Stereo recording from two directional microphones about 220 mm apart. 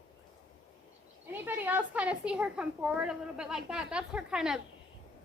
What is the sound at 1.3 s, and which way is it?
A woman's voice, 10° right (ahead or behind).